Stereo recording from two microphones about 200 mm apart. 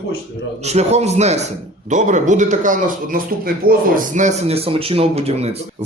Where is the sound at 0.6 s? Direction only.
35° right (ahead or behind).